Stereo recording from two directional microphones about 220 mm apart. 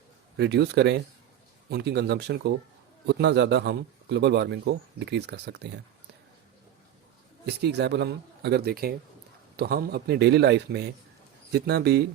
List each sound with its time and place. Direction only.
0.3 s a man's voice: 50° right (ahead or behind)
7.4 s a man's voice: 50° right (ahead or behind)